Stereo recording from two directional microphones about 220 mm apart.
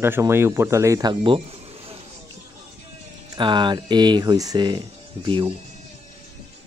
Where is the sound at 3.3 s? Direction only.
20° right (ahead or behind).